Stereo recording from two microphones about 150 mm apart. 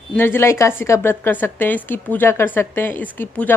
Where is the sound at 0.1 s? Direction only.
15° left (ahead or behind).